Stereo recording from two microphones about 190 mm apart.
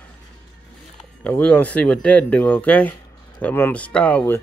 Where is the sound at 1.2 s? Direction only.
10° left (ahead or behind).